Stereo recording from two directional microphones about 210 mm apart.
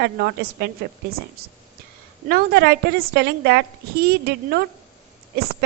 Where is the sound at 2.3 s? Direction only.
50° right (ahead or behind).